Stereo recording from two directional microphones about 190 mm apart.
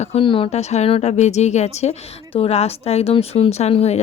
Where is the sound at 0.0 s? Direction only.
30° left (ahead or behind).